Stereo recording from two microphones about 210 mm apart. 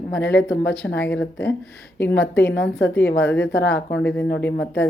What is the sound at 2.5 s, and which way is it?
Speech, 55° left (ahead or behind).